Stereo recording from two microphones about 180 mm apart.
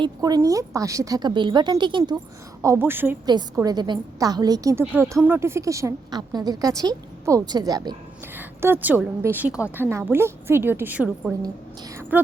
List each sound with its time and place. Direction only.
0.0 s a woman's voice: 20° right (ahead or behind)
2.6 s a woman's voice: 15° right (ahead or behind)
8.4 s a woman's voice: 10° right (ahead or behind)